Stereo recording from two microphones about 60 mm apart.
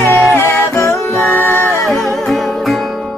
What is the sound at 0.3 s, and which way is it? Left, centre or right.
Music, left.